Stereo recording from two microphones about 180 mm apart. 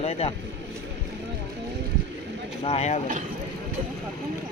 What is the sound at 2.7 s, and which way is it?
Speech, 35° left (ahead or behind).